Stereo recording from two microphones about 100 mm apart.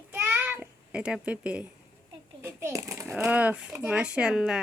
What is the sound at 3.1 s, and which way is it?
Speech, 10° right (ahead or behind).